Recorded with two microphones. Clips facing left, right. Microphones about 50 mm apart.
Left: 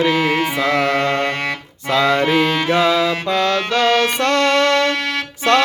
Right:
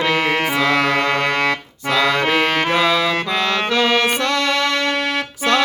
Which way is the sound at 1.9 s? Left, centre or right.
Right.